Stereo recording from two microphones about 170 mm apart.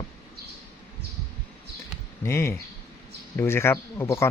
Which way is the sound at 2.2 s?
15° left (ahead or behind).